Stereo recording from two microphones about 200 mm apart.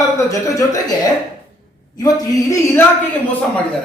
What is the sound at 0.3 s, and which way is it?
Speech, 15° left (ahead or behind).